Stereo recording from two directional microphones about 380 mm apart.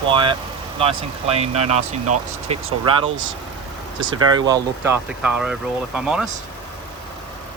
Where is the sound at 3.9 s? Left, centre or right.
Right.